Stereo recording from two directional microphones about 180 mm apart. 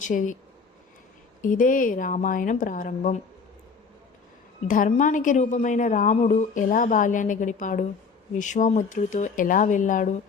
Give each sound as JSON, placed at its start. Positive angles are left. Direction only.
{"t": 0.0, "sound": "a woman's voice", "side_deg": 45}
{"t": 1.4, "sound": "a woman's voice", "side_deg": 45}
{"t": 4.7, "sound": "a woman's voice", "side_deg": 45}